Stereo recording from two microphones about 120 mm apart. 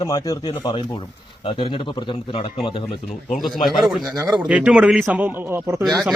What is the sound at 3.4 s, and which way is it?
Speech, centre (ahead or behind).